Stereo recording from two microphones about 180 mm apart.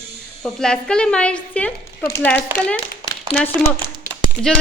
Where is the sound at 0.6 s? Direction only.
5° left (ahead or behind).